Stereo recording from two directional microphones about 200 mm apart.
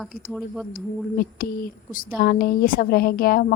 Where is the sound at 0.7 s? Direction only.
45° left (ahead or behind).